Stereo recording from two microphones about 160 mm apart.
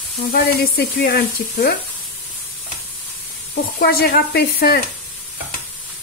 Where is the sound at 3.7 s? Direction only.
75° left (ahead or behind).